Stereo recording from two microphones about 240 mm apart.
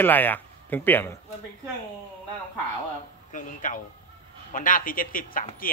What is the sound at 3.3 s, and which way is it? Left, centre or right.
Speech, left.